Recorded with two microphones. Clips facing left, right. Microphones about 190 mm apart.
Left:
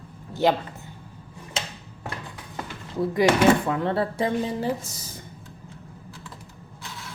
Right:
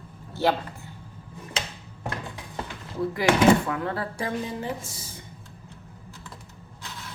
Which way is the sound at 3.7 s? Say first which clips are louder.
Left 5 dB; 25° left (ahead or behind).